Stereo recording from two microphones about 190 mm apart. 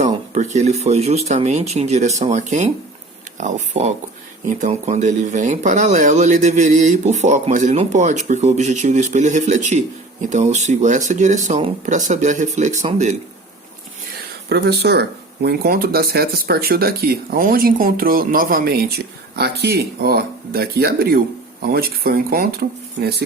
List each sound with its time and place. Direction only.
0.3 s speech: 40° right (ahead or behind)
14.5 s speech: 55° right (ahead or behind)